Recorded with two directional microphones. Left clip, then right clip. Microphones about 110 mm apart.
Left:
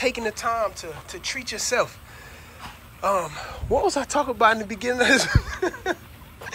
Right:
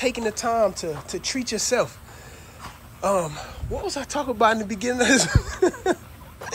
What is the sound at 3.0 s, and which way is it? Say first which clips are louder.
Speech: even; 40° right (ahead or behind).